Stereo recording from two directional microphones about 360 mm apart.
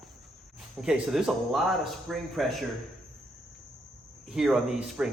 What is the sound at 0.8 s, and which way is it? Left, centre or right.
Speech, centre.